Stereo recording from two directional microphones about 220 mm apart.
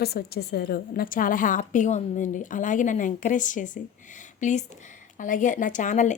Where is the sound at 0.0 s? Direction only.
45° left (ahead or behind).